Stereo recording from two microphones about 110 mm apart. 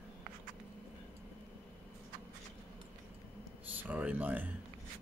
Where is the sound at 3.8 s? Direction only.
15° right (ahead or behind).